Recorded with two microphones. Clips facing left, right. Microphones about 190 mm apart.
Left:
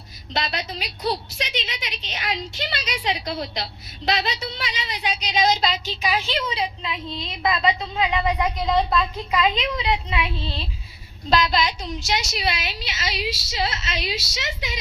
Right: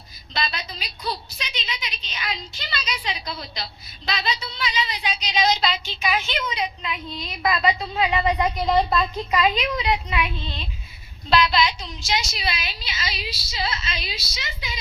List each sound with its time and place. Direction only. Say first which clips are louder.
0.3 s a woman's voice: left 2 dB; 70° left (ahead or behind); by 8.1 s 20° left (ahead or behind)
8.2 s a woman's voice: right 1 dB; centre (ahead or behind)
9.5 s speech: even; 25° left (ahead or behind)
11.3 s a woman's voice: right 1 dB; 40° left (ahead or behind); by 14.8 s 80° left